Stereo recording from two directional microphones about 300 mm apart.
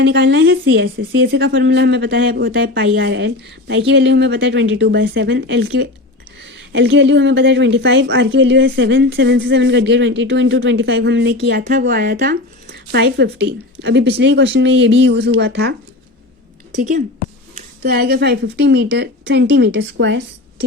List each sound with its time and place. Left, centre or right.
0.0 s a woman's voice: right
17.8 s a woman's voice: right